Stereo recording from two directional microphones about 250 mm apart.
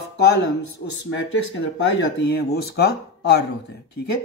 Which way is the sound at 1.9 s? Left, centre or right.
Left.